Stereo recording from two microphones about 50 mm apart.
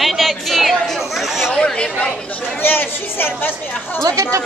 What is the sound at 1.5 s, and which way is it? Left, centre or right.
Speech, left.